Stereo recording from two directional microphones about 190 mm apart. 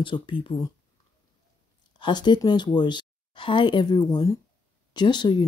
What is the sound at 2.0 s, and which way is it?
Speech, 25° left (ahead or behind).